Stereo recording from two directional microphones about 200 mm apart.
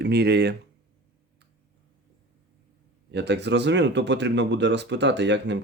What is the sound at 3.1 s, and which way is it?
Speech, 60° right (ahead or behind).